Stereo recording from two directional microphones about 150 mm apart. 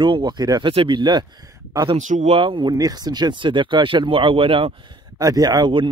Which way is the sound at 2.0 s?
55° right (ahead or behind).